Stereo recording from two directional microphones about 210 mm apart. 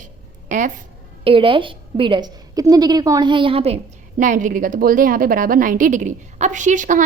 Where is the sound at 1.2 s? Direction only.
25° right (ahead or behind).